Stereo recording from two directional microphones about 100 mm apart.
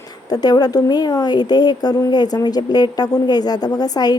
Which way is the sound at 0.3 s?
40° left (ahead or behind).